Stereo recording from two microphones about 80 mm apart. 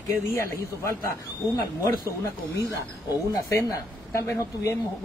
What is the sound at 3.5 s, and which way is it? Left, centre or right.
Speech, left.